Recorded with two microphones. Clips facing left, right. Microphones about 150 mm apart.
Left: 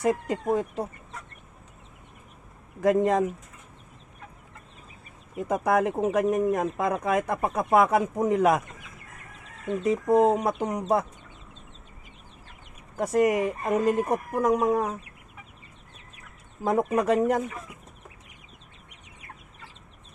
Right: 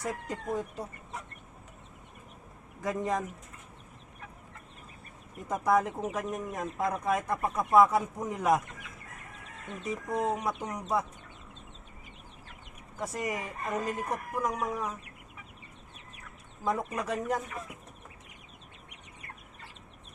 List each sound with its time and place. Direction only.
0.0 s speech: 70° left (ahead or behind)
2.8 s speech: 70° left (ahead or behind)
5.4 s speech: 70° left (ahead or behind); by 8.6 s 90° left
9.8 s speech: 80° left; by 11.0 s 60° left (ahead or behind)
13.0 s speech: 60° left (ahead or behind)
16.6 s speech: 60° left (ahead or behind)